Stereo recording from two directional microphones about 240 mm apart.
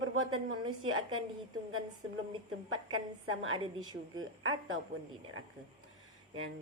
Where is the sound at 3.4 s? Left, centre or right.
Right.